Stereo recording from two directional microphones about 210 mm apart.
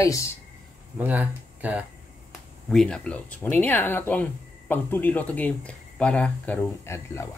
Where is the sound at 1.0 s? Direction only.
5° right (ahead or behind); by 7.3 s 10° left (ahead or behind).